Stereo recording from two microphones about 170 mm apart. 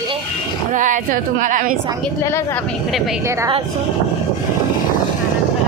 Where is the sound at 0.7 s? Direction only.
50° right (ahead or behind).